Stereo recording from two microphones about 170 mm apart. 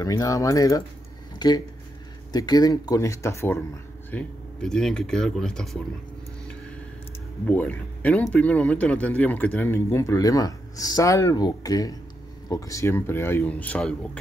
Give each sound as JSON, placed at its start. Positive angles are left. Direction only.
{"t": 0.0, "sound": "speech", "side_deg": 20}
{"t": 4.1, "sound": "speech", "side_deg": 5}
{"t": 7.4, "sound": "speech", "side_deg": 10}